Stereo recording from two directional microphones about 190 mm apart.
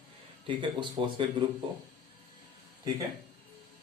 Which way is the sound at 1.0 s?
30° right (ahead or behind).